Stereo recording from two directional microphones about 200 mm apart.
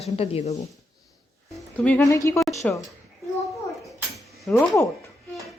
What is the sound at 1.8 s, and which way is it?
Speech, 10° left (ahead or behind).